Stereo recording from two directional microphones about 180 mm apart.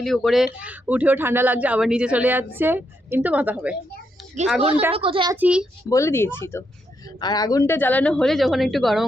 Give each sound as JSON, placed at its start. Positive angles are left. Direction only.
{"t": 0.0, "sound": "speech", "side_deg": 0}
{"t": 4.9, "sound": "a child's voice", "side_deg": -30}
{"t": 5.3, "sound": "speech", "side_deg": -10}
{"t": 5.9, "sound": "speech", "side_deg": 15}